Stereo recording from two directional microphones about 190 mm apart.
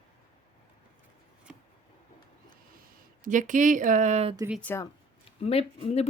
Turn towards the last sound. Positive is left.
turn(degrees=35)  # may be behind; listen again after turning